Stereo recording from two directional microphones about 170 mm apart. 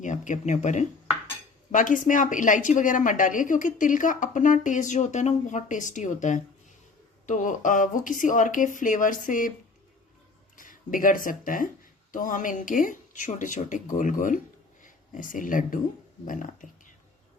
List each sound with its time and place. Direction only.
0.0 s a woman's voice: 45° left (ahead or behind)
10.6 s a woman's voice: 55° left (ahead or behind)